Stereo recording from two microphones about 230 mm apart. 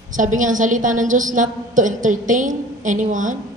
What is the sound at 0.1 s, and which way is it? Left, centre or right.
A woman's voice, right.